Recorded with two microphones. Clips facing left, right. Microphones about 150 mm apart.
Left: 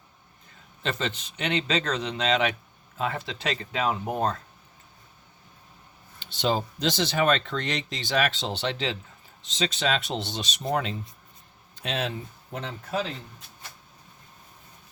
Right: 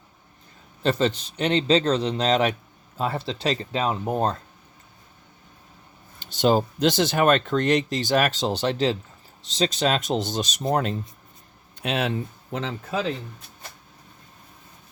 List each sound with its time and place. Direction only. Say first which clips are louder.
0.8 s a man's voice: right 8 dB; 35° right (ahead or behind)
6.1 s speech: right 6 dB; 45° right (ahead or behind)
11.8 s speech: right 5 dB; 60° right (ahead or behind)
12.5 s speech: right 5 dB; 90° right